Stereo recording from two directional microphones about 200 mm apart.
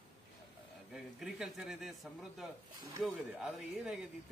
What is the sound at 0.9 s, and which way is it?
A man's voice, centre (ahead or behind).